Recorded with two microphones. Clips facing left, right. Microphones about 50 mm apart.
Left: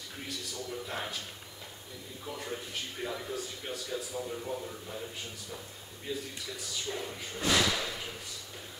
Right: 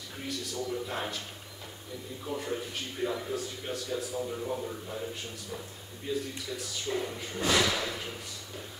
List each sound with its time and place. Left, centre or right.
0.7 s speech: centre
2.2 s speech: centre
3.9 s speech: centre
6.1 s speech: centre